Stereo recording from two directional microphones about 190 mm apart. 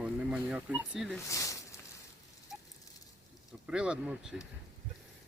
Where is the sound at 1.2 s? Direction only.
15° left (ahead or behind).